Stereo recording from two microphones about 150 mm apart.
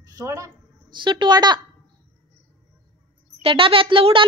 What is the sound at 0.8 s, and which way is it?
Speech, 30° right (ahead or behind).